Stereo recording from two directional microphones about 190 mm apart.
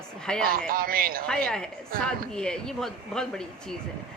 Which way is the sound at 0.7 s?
50° right (ahead or behind).